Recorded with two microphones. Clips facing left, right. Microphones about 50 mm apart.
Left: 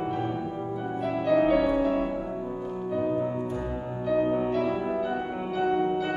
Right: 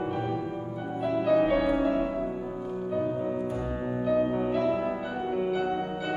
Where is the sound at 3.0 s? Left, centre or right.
Centre.